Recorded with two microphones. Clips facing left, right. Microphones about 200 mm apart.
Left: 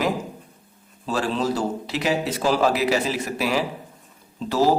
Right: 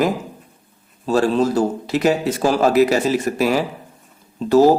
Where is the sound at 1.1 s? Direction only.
45° right (ahead or behind).